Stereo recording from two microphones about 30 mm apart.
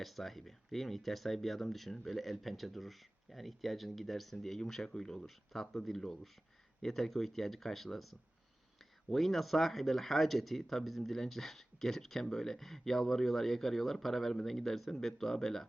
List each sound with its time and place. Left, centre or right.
0.0 s speech: centre
5.2 s speech: centre
9.0 s speech: centre